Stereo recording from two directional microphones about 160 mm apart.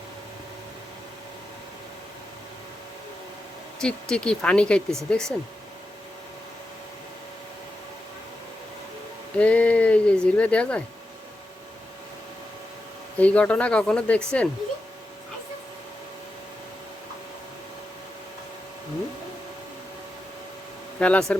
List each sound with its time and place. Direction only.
3.8 s speech: 5° left (ahead or behind)
9.4 s speech: 10° left (ahead or behind)
13.1 s speech: 10° left (ahead or behind)
21.0 s speech: 5° left (ahead or behind)